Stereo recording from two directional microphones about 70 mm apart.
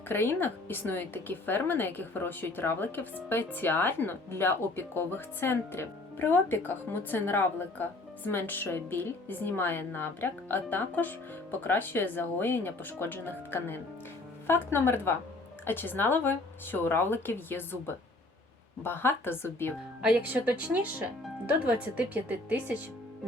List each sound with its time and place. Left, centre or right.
0.1 s speech: left
20.2 s speech: right